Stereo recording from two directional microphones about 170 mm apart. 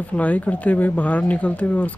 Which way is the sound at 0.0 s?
10° left (ahead or behind).